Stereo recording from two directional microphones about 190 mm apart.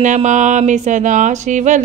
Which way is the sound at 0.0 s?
40° right (ahead or behind).